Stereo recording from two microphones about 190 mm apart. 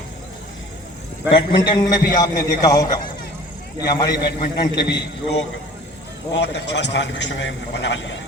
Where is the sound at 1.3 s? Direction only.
25° left (ahead or behind).